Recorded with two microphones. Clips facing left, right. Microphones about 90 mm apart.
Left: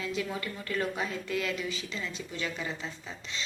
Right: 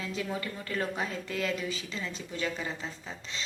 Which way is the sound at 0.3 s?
25° right (ahead or behind).